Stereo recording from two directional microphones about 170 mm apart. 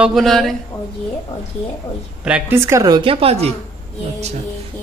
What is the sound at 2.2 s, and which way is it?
Speech, 10° right (ahead or behind).